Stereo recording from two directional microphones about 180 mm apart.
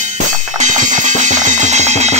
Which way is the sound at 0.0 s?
40° right (ahead or behind).